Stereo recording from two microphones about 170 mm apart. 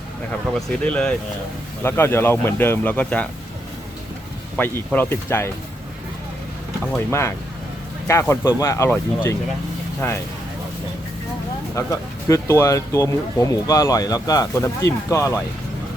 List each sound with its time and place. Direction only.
0.5 s speech: 5° left (ahead or behind)
4.5 s speech: 10° left (ahead or behind)
7.1 s speech: 15° left (ahead or behind)
11.7 s speech: 20° left (ahead or behind)